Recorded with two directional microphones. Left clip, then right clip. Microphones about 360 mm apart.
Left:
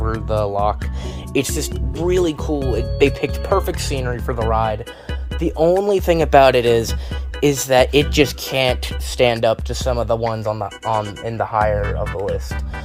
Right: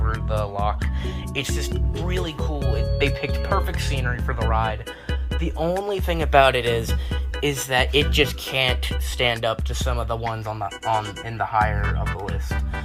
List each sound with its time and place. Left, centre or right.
0.3 s music: left
1.3 s speech: left
11.8 s speech: centre